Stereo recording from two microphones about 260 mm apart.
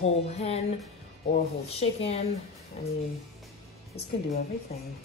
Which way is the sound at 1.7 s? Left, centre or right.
Left.